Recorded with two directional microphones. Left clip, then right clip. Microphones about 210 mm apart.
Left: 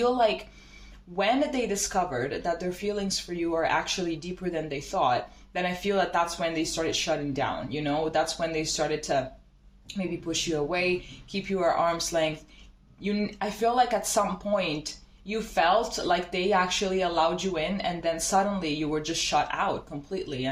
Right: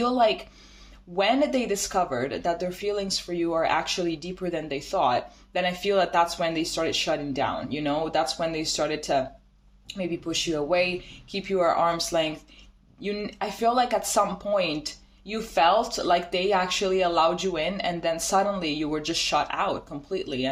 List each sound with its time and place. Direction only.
1.1 s speech: 50° right (ahead or behind)